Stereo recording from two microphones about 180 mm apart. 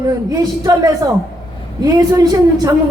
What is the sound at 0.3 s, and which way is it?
A man's voice, 20° right (ahead or behind).